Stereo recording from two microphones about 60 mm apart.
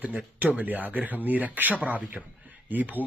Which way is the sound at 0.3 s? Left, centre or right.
Right.